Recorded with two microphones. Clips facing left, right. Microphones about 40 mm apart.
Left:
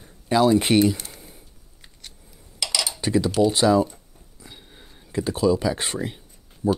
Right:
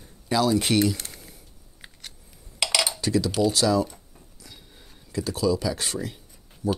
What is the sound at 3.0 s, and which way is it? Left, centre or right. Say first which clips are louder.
Cutlery: left 2 dB; left.